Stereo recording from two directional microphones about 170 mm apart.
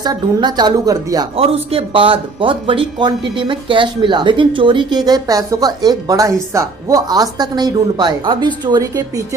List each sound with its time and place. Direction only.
0.0 s speech: 25° right (ahead or behind)
1.4 s speech: 35° right (ahead or behind); by 9.2 s 20° right (ahead or behind)